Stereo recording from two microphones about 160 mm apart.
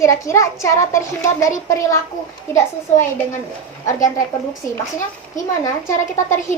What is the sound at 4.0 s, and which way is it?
Speech, 20° left (ahead or behind).